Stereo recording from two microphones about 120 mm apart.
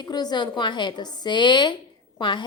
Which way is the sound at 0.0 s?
35° left (ahead or behind).